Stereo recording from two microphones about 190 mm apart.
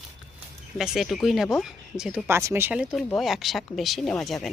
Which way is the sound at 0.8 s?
Centre (ahead or behind).